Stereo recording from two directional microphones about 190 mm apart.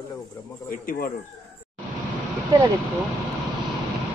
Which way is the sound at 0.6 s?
50° left (ahead or behind).